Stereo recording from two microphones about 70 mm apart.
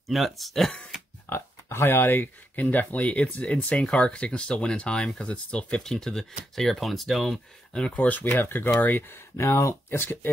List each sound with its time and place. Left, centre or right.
0.1 s speech: centre
1.3 s speech: left; by 7.3 s centre
7.7 s speech: centre
9.4 s speech: left